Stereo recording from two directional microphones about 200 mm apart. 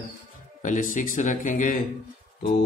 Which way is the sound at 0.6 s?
40° left (ahead or behind).